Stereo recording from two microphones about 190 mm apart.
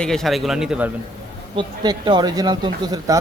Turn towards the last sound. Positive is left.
turn(degrees=-20)  # may be behind; listen again after turning